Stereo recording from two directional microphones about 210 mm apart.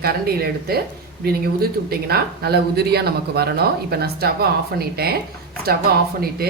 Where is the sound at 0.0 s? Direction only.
45° right (ahead or behind).